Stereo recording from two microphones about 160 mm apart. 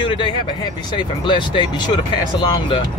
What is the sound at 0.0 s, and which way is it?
Speech, 30° left (ahead or behind).